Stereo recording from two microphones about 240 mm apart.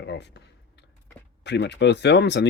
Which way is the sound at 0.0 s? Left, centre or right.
Left.